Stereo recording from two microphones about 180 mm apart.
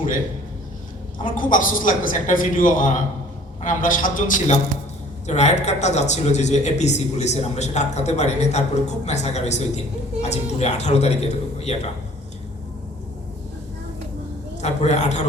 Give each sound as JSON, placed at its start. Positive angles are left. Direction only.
{"t": 1.2, "sound": "a woman's voice", "side_deg": 50}
{"t": 14.6, "sound": "speech", "side_deg": 40}